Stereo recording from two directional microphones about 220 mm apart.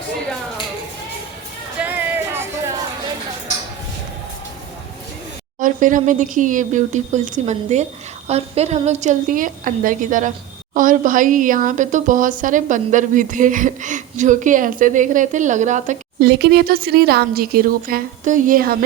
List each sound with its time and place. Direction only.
1.8 s music: 10° right (ahead or behind)
5.5 s speech: 35° right (ahead or behind)
16.2 s a woman's voice: 45° right (ahead or behind)